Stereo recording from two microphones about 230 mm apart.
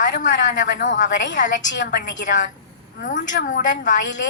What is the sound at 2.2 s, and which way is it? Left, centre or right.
A woman's voice, left.